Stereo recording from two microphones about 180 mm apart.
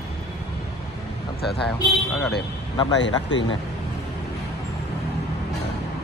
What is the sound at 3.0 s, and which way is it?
Speech, 85° left.